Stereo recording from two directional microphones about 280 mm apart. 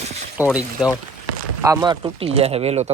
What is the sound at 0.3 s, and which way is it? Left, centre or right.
Speech, centre.